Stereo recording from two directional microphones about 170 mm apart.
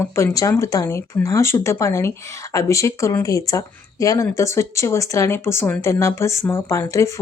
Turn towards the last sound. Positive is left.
turn(degrees=15)  # may be behind; listen again after turning